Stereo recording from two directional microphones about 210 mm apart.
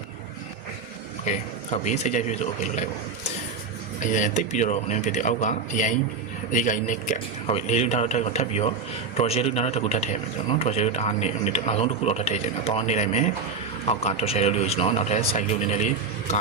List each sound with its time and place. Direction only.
1.2 s a man's voice: 35° left (ahead or behind)
4.0 s a man's voice: 35° left (ahead or behind)